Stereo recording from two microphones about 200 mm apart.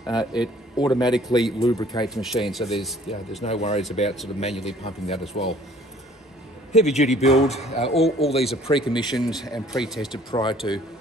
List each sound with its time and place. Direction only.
0.0 s speech: 20° left (ahead or behind)
2.0 s speech: centre (ahead or behind)
3.4 s speech: 30° left (ahead or behind)
6.7 s speech: 35° left (ahead or behind)
9.2 s speech: centre (ahead or behind)
10.1 s speech: 25° left (ahead or behind)